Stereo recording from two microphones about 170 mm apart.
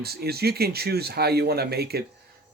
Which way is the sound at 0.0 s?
65° right (ahead or behind).